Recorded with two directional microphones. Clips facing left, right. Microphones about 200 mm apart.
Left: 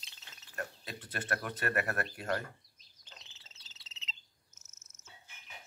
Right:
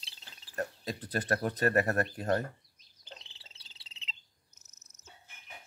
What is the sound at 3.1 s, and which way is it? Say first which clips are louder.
Cricket: right 7 dB; 30° right (ahead or behind).